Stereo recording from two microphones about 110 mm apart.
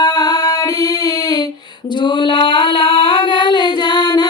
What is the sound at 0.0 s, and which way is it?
Female singing, 40° left (ahead or behind).